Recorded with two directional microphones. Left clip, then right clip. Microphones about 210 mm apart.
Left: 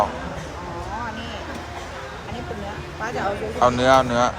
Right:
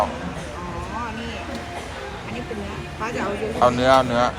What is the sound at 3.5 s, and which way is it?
Speech, 20° left (ahead or behind).